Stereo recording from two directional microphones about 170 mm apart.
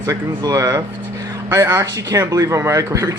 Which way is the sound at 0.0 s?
15° right (ahead or behind).